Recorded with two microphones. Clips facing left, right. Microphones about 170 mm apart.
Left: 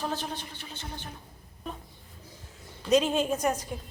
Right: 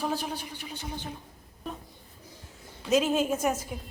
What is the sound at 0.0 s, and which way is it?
A woman's voice, 10° right (ahead or behind).